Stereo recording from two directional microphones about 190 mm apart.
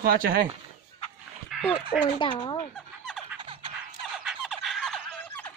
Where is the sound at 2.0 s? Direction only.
25° left (ahead or behind).